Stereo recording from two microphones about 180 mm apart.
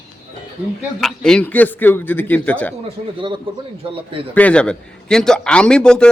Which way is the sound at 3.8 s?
30° right (ahead or behind).